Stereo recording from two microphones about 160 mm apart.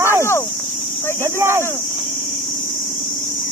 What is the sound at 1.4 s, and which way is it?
Speech, 15° right (ahead or behind).